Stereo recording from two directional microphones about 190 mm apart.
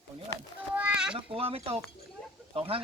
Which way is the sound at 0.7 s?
5° right (ahead or behind).